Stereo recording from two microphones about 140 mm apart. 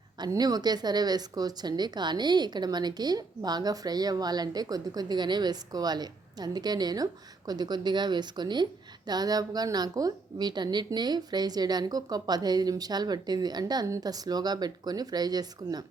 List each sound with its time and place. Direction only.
0.2 s speech: 30° right (ahead or behind)